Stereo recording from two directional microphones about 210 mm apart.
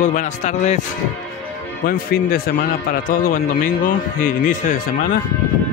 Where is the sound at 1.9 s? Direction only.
45° left (ahead or behind).